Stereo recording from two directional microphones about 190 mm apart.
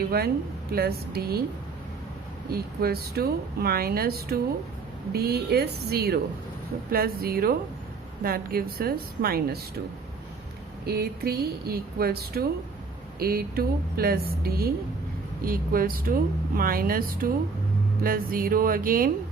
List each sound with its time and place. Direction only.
0.1 s a woman's voice: 55° right (ahead or behind)
2.5 s a woman's voice: 55° right (ahead or behind)
10.8 s a woman's voice: 55° right (ahead or behind)